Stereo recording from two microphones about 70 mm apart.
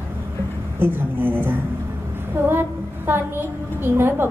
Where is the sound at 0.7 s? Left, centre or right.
Right.